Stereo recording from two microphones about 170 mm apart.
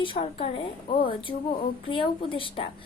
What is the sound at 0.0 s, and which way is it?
Speech, 30° left (ahead or behind).